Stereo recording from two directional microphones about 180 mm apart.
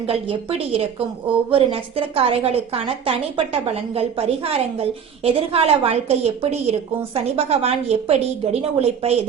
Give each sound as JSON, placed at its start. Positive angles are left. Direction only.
{"t": 0.1, "sound": "a woman's voice", "side_deg": -30}